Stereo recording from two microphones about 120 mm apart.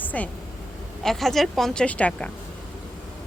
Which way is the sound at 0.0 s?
15° left (ahead or behind).